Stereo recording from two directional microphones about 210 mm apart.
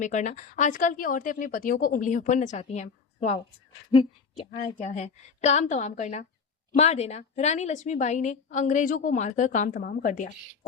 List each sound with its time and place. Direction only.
0.0 s a woman's voice: 35° left (ahead or behind)